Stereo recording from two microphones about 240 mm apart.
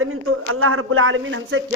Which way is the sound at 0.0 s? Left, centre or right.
Right.